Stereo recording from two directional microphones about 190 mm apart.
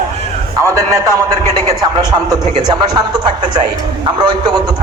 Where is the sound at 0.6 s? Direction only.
15° right (ahead or behind).